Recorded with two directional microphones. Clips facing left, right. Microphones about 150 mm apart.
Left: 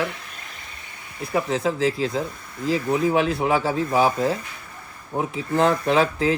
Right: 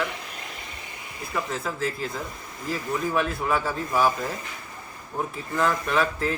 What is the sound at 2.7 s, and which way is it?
Speech, 75° left (ahead or behind).